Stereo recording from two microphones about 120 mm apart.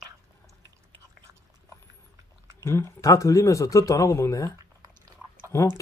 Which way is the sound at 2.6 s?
25° left (ahead or behind).